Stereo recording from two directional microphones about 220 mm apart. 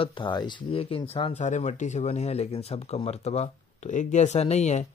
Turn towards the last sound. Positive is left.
turn(degrees=30)  # may be behind; listen again after turning